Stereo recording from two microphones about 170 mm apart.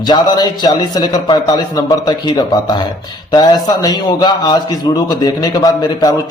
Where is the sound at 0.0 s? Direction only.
25° left (ahead or behind).